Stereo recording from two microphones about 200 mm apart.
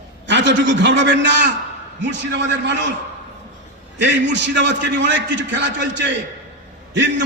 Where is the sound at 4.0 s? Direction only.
60° right (ahead or behind).